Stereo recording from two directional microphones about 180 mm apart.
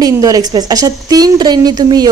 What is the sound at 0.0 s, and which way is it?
A woman's voice, 20° right (ahead or behind).